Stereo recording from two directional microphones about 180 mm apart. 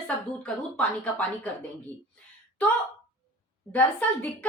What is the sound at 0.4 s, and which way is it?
Speech, 10° left (ahead or behind).